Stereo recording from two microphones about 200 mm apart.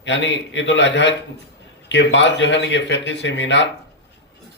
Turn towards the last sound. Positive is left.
turn(degrees=65)  # may be behind; listen again after turning